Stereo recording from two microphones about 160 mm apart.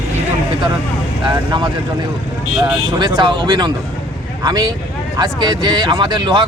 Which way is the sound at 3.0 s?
30° right (ahead or behind).